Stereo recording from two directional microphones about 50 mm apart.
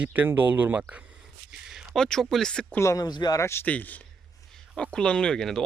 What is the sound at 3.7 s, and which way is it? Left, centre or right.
Speech, left.